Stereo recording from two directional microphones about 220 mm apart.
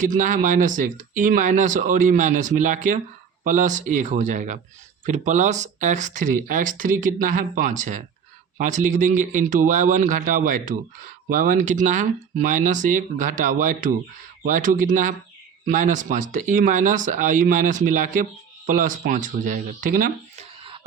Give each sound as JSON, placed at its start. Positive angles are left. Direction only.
{"t": 0.0, "sound": "speech", "side_deg": -35}